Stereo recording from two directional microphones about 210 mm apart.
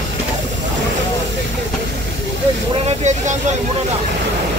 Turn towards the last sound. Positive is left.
turn(degrees=-35)  # may be behind; listen again after turning